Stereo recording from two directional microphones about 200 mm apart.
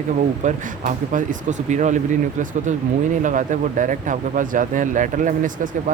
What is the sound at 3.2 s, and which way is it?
Speech, 40° right (ahead or behind).